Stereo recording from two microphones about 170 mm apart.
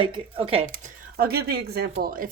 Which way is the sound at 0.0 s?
30° right (ahead or behind).